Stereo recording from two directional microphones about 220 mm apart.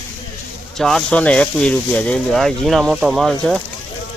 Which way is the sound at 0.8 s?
Centre (ahead or behind).